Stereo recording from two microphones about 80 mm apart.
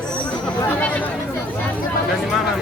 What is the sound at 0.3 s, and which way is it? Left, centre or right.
Chatter, centre.